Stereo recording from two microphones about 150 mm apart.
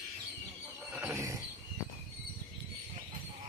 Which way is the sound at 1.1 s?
20° right (ahead or behind).